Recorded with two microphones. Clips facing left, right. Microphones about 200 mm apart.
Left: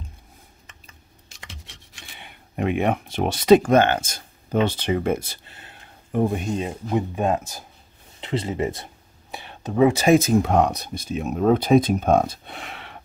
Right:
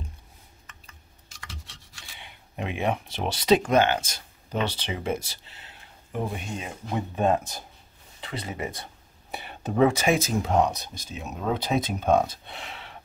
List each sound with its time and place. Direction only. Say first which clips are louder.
2.1 s speech: left 7 dB; 55° left (ahead or behind); by 6.7 s 40° left (ahead or behind)
6.9 s speech: left 1 dB; 15° left (ahead or behind)
8.2 s speech: left 8 dB; 25° left (ahead or behind)
9.3 s whispering: even; centre (ahead or behind)
10.1 s speech: left 6 dB; 60° left (ahead or behind)